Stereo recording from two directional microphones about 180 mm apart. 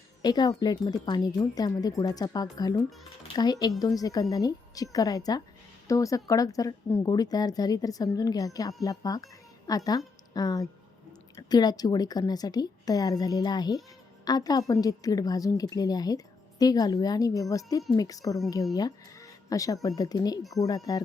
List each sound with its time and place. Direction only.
0.2 s a woman's voice: 25° left (ahead or behind)